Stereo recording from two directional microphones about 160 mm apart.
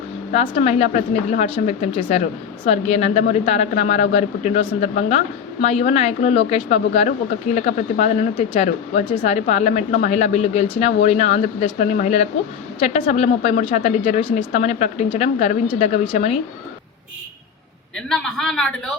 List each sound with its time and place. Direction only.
0.3 s speech: 40° left (ahead or behind)
18.1 s a woman's voice: centre (ahead or behind)